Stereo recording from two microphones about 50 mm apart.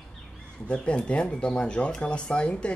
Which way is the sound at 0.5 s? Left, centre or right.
Left.